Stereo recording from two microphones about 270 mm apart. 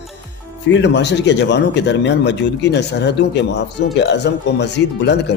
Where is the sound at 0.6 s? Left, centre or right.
Left.